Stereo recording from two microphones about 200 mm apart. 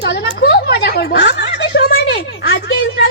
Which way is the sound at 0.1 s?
60° left (ahead or behind).